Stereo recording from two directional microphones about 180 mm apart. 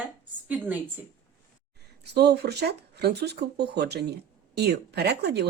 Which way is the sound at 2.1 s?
65° right (ahead or behind).